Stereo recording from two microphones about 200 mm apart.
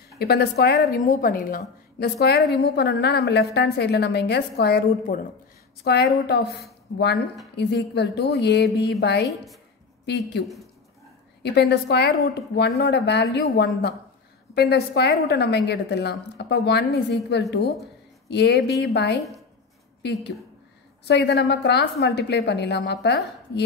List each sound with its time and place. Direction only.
0.2 s a woman's voice: 50° left (ahead or behind)
9.3 s a woman's voice: centre (ahead or behind)
10.0 s a woman's voice: 55° left (ahead or behind)
11.4 s a woman's voice: 55° left (ahead or behind)
20.0 s a woman's voice: 55° left (ahead or behind)